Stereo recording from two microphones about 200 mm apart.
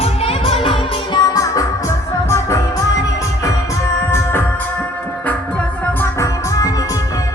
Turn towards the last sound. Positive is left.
turn(degrees=15)  # may be behind; listen again after turning